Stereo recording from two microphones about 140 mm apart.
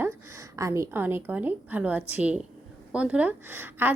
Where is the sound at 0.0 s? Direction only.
20° right (ahead or behind).